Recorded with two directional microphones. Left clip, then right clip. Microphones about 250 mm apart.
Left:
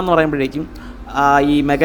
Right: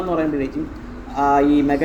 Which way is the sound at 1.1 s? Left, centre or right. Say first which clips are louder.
Left 3 dB; left.